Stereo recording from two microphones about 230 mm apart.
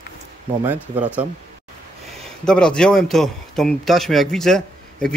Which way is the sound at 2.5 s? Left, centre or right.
Centre.